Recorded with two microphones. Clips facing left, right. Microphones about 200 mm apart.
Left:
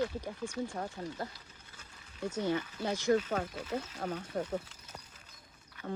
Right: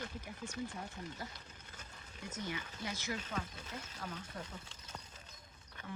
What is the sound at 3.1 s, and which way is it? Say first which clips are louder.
Speech: left 15 dB; 50° left (ahead or behind).